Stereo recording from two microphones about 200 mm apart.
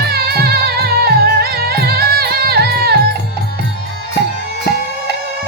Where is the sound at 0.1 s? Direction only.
50° right (ahead or behind).